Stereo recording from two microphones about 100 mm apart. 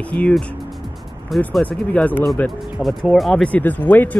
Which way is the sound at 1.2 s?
Centre (ahead or behind).